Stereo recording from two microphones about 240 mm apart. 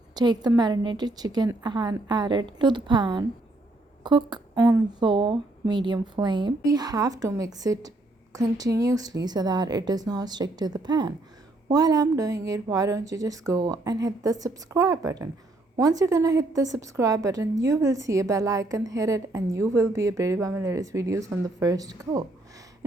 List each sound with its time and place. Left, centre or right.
0.2 s speech: centre